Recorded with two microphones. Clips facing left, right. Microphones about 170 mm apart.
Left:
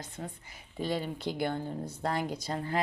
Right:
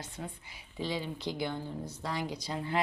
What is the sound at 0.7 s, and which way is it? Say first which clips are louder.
Speech: left 3 dB; 55° left (ahead or behind).